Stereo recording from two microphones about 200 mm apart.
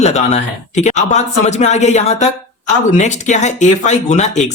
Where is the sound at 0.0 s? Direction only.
35° left (ahead or behind).